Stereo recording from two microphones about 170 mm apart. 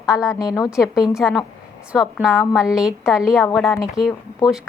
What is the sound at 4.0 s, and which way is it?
Speech, 35° right (ahead or behind).